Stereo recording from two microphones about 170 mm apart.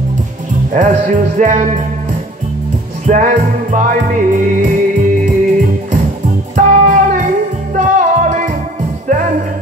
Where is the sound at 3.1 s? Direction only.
50° right (ahead or behind).